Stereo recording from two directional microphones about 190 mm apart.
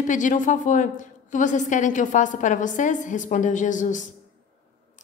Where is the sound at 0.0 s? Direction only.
40° left (ahead or behind).